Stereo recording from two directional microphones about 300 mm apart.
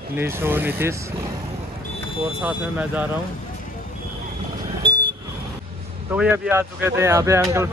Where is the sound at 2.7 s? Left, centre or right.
Centre.